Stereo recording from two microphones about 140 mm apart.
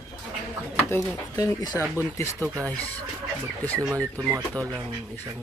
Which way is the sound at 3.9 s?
20° right (ahead or behind).